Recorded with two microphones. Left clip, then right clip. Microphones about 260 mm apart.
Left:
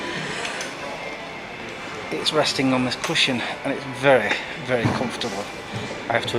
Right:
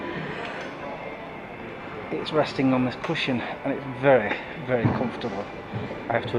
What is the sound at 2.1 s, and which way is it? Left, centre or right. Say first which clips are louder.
Speech: left 4 dB; centre.